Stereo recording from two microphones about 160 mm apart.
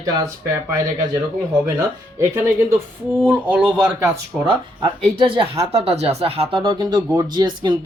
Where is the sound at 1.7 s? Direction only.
15° right (ahead or behind); by 4.5 s centre (ahead or behind).